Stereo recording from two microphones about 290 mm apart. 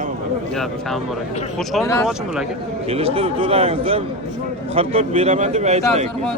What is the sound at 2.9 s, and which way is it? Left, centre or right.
Speech, centre.